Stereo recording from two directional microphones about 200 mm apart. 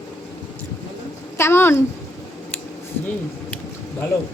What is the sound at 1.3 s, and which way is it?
Speech, 10° left (ahead or behind).